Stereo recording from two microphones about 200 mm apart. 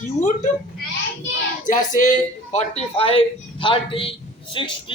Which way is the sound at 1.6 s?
40° left (ahead or behind).